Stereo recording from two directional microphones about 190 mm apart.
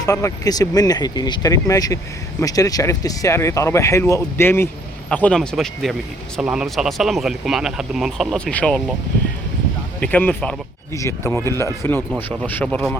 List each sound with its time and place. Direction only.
0.0 s speech: 15° left (ahead or behind)
10.0 s speech: 10° left (ahead or behind)